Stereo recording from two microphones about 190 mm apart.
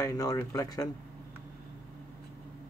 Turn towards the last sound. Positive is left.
turn(degrees=15)  # may be behind; listen again after turning